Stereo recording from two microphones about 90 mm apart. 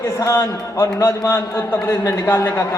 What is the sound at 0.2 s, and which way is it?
A man's voice, 30° left (ahead or behind).